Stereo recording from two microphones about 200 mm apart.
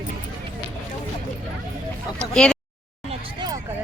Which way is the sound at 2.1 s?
5° left (ahead or behind).